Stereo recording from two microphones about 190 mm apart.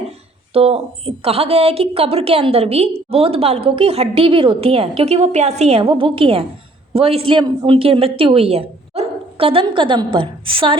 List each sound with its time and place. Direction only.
0.5 s a woman's voice: 30° right (ahead or behind)